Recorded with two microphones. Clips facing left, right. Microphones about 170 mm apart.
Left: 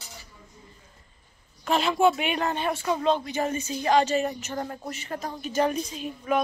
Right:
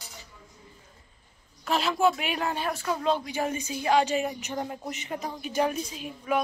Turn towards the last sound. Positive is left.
turn(degrees=-5)  # may be behind; listen again after turning